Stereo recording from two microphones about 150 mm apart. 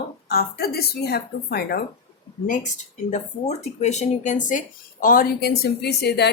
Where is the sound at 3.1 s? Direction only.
50° left (ahead or behind).